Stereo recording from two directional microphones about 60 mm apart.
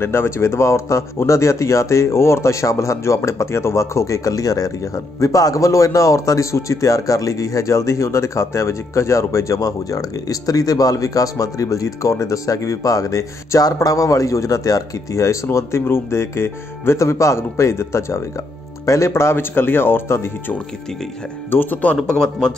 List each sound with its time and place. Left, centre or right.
0.0 s speech: left
15.5 s speech: left
21.5 s speech: left
22.0 s a man's voice: centre